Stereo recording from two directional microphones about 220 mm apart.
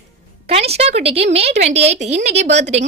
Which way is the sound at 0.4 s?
30° right (ahead or behind).